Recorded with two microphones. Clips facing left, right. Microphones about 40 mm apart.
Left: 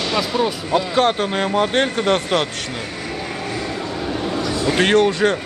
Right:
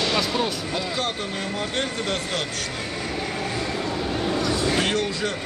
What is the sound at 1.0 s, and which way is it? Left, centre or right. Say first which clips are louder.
Speech: left 10 dB; left.